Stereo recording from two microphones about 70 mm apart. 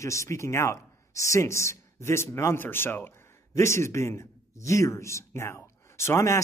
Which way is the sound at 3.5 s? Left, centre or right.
Left.